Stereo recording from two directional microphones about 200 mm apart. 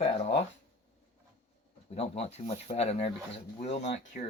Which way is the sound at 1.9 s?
30° left (ahead or behind).